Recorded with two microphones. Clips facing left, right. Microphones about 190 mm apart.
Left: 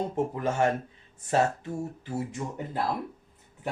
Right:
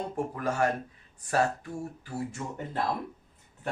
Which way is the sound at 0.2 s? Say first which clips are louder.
Left 2 dB; 25° left (ahead or behind).